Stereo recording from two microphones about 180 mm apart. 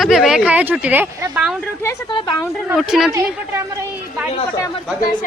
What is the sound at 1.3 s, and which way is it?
Speech, 5° right (ahead or behind).